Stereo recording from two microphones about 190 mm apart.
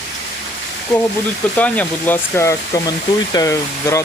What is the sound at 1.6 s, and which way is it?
Speech, 10° left (ahead or behind).